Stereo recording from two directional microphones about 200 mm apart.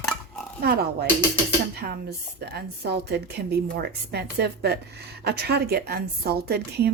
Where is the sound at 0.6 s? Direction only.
50° right (ahead or behind).